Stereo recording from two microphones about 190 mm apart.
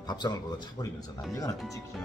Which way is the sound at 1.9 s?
Centre (ahead or behind).